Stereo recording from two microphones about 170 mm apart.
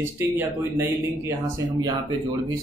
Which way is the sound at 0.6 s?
15° right (ahead or behind).